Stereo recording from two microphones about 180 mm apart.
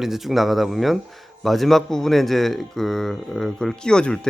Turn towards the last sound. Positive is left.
turn(degrees=5)  # may be behind; listen again after turning